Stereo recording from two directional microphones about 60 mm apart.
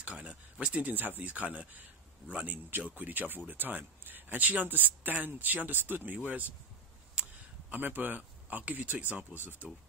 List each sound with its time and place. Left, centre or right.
0.1 s speech: centre
7.2 s a sound: right
7.7 s speech: right